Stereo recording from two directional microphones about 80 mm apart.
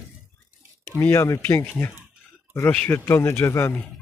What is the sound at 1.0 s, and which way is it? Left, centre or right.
Speech, left.